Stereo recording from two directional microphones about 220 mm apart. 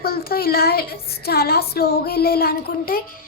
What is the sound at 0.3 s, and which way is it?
A child's voice, 45° left (ahead or behind).